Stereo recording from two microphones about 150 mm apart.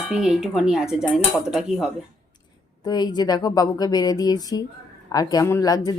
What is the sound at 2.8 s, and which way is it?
Speech, 25° left (ahead or behind).